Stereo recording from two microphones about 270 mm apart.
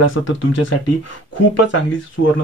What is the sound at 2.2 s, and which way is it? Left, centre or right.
Speech, left.